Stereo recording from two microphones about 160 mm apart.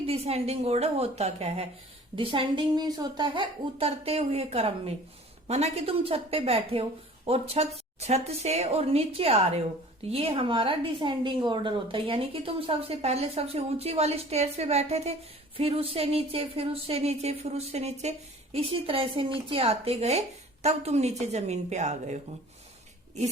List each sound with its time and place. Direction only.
0.0 s a woman's voice: 40° right (ahead or behind)